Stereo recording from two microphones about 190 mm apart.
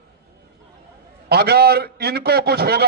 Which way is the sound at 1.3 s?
60° right (ahead or behind).